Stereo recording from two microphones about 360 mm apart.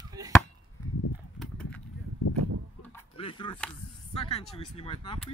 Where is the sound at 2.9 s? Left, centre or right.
Centre.